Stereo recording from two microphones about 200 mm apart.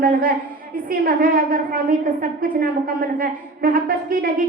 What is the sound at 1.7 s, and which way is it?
Speech, 45° right (ahead or behind).